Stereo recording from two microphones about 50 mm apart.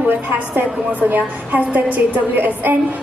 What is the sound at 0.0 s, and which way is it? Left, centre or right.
A man's voice, right.